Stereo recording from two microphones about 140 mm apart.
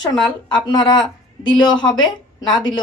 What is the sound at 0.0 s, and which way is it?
Speech, 35° left (ahead or behind).